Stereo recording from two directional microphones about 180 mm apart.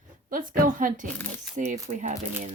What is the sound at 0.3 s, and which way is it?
Speech, 50° right (ahead or behind).